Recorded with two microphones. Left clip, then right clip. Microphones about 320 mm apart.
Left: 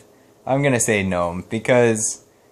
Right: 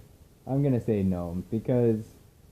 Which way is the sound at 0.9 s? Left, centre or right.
Left.